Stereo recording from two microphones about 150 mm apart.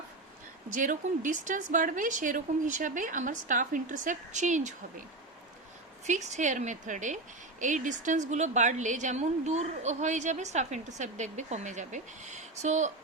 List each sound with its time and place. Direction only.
0.8 s speech: 60° right (ahead or behind)
6.1 s a woman's voice: 55° right (ahead or behind)